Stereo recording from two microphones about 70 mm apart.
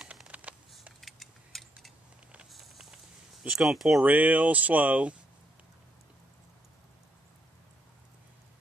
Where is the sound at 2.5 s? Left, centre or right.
Centre.